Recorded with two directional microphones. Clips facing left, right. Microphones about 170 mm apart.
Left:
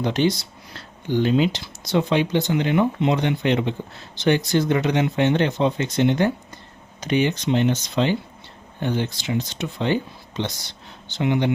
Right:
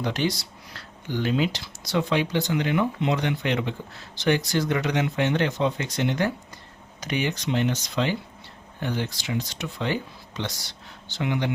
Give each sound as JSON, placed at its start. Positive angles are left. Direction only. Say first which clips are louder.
{"t": 0.0, "sound": "speech", "louder": "left 5 dB", "side_deg": 25}